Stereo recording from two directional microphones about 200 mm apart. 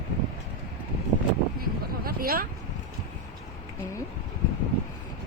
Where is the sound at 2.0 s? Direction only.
45° right (ahead or behind).